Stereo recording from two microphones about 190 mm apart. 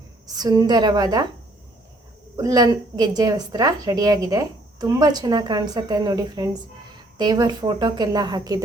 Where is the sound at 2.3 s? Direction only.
20° right (ahead or behind).